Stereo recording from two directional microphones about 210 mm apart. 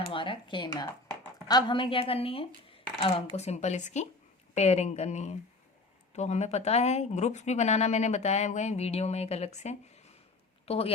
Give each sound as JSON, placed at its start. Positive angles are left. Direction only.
{"t": 0.0, "sound": "speech", "side_deg": 25}